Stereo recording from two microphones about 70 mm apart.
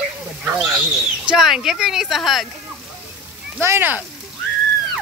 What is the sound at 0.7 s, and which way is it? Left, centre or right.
Speech, centre.